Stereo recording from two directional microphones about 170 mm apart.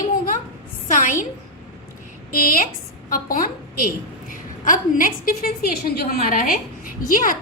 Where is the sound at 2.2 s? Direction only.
55° left (ahead or behind).